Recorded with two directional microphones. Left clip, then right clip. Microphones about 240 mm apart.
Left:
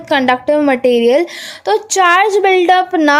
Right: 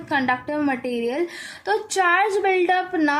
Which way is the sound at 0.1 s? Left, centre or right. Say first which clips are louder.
Left 10 dB; left.